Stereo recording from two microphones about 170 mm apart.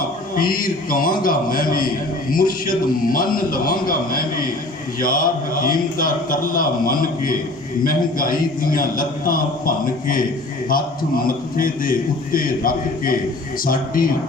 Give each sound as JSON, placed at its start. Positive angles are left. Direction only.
{"t": 0.3, "sound": "a man's voice", "side_deg": 55}
{"t": 11.5, "sound": "a man's voice", "side_deg": 55}